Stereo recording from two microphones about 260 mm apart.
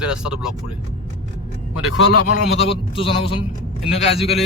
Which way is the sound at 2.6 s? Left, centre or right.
Left.